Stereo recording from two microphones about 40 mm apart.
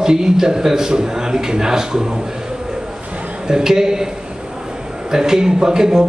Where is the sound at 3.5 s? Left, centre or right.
Centre.